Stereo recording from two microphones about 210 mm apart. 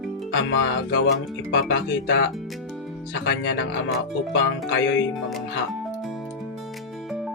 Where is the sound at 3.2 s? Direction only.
60° left (ahead or behind).